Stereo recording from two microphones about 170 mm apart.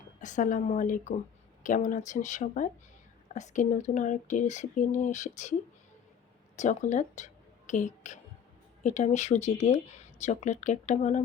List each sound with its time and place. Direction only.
0.2 s speech: 45° left (ahead or behind)
6.6 s speech: 45° left (ahead or behind)